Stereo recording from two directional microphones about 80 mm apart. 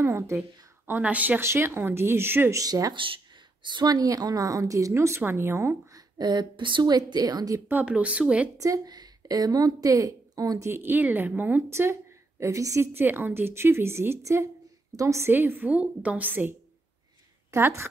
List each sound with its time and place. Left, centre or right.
0.0 s a woman's voice: right
0.8 s a woman's voice: right
1.4 s a woman's voice: right
2.5 s a woman's voice: right
2.9 s speech: right
3.6 s a woman's voice: right
5.9 s a woman's voice: right
7.8 s speech: centre
8.5 s a woman's voice: right
10.7 s a woman's voice: right
15.3 s a woman's voice: right